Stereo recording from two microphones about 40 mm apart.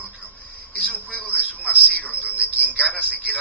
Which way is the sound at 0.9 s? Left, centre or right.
Left.